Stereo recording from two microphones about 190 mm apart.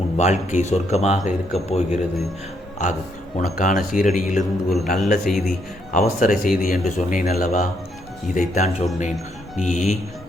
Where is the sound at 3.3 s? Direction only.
40° left (ahead or behind).